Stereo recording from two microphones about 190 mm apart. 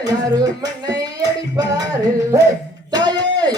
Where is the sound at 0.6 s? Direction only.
20° right (ahead or behind).